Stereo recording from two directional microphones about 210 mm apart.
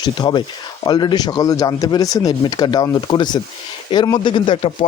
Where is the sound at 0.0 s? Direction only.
20° left (ahead or behind).